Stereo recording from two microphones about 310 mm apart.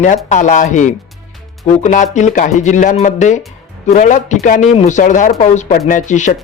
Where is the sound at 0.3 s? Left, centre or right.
Left.